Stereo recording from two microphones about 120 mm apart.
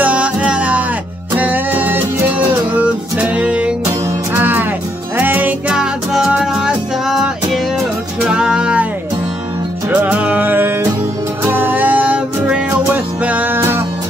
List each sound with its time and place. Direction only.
0.0 s music: 10° right (ahead or behind)
9.8 s music: 15° right (ahead or behind)